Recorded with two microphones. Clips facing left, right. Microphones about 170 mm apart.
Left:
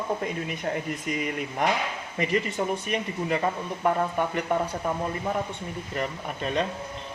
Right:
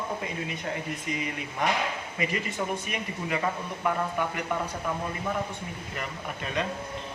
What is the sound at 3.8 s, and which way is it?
Speech, 35° left (ahead or behind).